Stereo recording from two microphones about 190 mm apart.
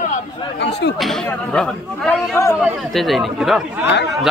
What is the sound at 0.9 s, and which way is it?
Speech, centre (ahead or behind).